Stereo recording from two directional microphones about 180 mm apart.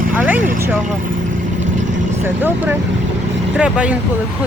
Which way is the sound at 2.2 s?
10° right (ahead or behind).